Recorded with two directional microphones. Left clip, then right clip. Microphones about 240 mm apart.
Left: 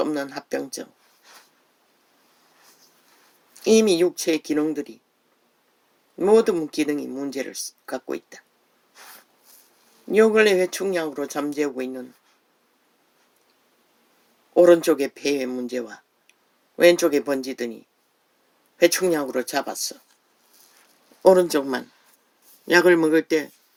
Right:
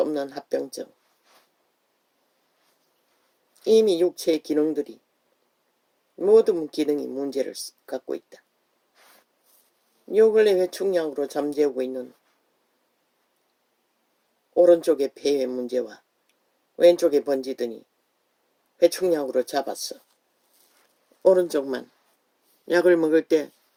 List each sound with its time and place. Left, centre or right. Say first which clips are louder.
0.0 s speech: even; left
3.5 s speech: left 1 dB; left
6.1 s speech: even; left
10.2 s speech: left 1 dB; left
14.5 s speech: left 2 dB; left
18.8 s speech: left 1 dB; left
21.2 s speech: left 3 dB; left